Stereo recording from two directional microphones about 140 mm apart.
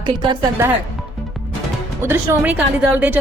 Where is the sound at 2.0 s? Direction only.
15° right (ahead or behind).